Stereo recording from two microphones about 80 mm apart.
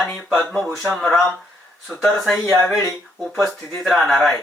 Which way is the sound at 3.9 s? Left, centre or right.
Centre.